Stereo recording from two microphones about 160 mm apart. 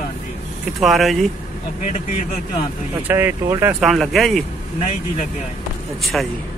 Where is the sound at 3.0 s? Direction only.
15° right (ahead or behind).